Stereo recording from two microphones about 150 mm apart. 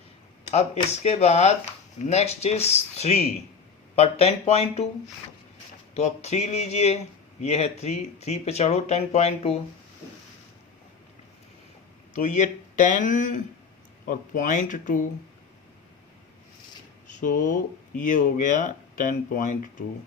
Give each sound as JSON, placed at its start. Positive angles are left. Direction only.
{"t": 0.5, "sound": "speech", "side_deg": 45}
{"t": 5.9, "sound": "speech", "side_deg": 45}
{"t": 12.1, "sound": "speech", "side_deg": 55}
{"t": 17.1, "sound": "speech", "side_deg": 60}